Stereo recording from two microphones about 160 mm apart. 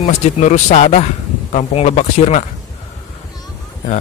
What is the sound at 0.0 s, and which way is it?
Speech, 45° left (ahead or behind).